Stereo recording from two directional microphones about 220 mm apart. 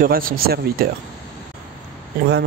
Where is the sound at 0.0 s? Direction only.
40° right (ahead or behind).